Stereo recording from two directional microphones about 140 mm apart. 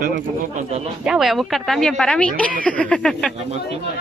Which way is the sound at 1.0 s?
5° right (ahead or behind).